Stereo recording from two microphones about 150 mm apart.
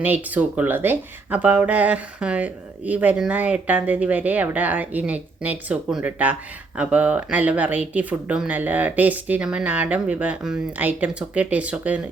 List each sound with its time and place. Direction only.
0.0 s speech: 10° right (ahead or behind)